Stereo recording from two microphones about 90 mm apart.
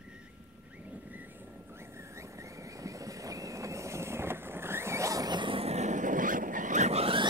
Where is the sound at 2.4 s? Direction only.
35° right (ahead or behind).